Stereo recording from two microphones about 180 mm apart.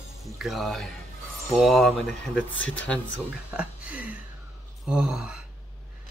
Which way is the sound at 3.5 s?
5° right (ahead or behind).